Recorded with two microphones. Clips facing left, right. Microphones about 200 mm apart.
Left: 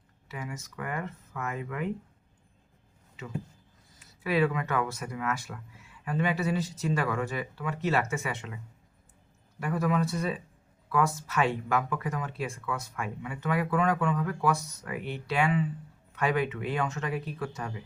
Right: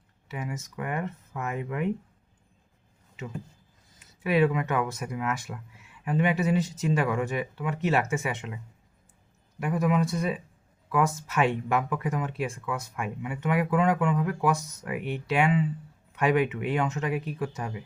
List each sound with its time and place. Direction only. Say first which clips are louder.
0.3 s speech: right 4 dB; 20° right (ahead or behind)
4.0 s speech: right 3 dB; 20° right (ahead or behind)
9.6 s speech: right 2 dB; 15° right (ahead or behind)